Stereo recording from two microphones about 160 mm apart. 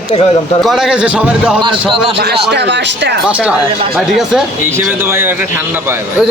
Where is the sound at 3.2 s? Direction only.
5° right (ahead or behind).